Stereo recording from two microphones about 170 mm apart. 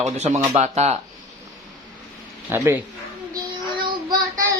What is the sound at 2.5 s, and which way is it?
Speech, 15° right (ahead or behind).